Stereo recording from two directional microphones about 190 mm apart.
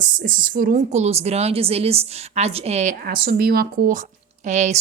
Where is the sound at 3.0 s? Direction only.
55° right (ahead or behind); by 4.8 s 40° right (ahead or behind).